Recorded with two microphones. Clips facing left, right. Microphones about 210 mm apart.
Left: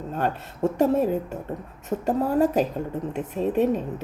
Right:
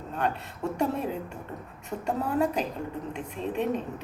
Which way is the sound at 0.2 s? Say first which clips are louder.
Left 5 dB; 45° left (ahead or behind).